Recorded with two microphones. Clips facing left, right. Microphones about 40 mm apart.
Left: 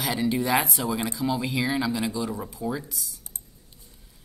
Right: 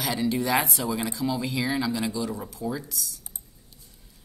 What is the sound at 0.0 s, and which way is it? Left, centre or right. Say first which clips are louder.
Speech: left 1 dB; centre.